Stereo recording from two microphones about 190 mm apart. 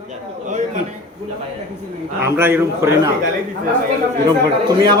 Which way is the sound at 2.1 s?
10° right (ahead or behind).